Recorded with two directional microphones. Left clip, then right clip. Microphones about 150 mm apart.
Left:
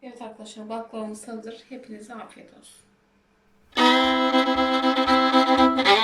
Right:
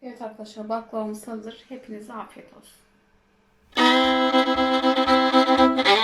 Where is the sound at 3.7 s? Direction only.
Centre (ahead or behind).